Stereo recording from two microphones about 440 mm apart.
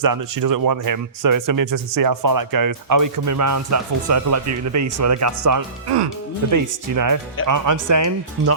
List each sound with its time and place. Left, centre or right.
0.0 s speech: right